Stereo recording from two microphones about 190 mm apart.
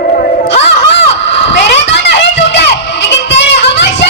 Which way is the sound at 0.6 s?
65° left (ahead or behind).